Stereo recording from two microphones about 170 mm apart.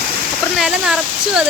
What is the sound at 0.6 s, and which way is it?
Speech, 5° right (ahead or behind).